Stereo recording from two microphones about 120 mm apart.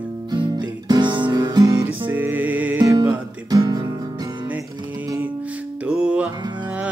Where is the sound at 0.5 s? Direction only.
40° right (ahead or behind).